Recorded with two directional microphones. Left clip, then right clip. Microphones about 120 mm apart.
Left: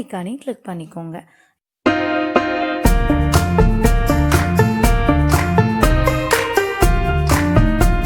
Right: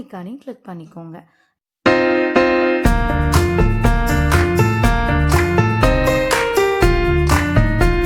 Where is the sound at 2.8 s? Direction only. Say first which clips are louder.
Even; centre (ahead or behind).